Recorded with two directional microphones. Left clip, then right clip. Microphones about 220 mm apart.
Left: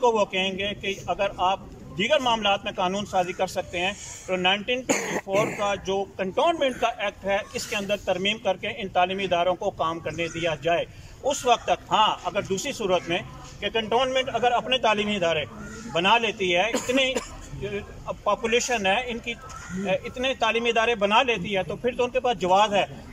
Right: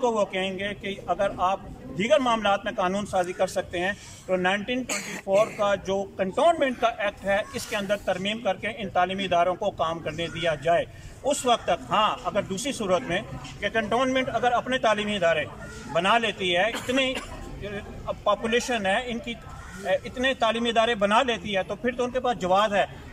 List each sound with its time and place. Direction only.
0.0 s a man's voice: 5° left (ahead or behind)
4.8 s speech: 30° left (ahead or behind)
5.6 s a man's voice: 5° left (ahead or behind)